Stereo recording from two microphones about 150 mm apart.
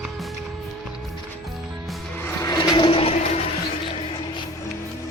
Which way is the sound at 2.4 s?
25° left (ahead or behind).